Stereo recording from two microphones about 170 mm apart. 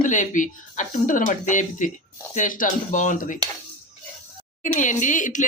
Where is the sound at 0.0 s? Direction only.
45° left (ahead or behind).